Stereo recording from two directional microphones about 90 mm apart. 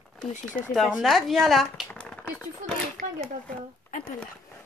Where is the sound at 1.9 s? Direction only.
10° left (ahead or behind).